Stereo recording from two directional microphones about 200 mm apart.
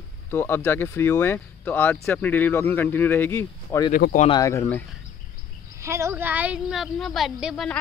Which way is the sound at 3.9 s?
45° left (ahead or behind).